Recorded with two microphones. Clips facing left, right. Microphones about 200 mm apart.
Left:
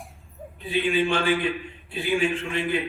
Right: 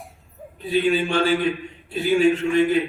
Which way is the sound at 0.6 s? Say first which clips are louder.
Right 3 dB; 40° right (ahead or behind).